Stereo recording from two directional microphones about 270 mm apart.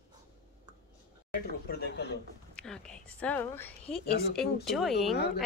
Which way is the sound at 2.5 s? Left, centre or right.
Centre.